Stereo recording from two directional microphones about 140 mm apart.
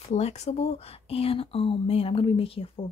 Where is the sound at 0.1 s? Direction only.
50° left (ahead or behind).